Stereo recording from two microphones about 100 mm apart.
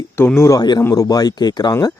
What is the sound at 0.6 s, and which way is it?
Speech, 45° left (ahead or behind).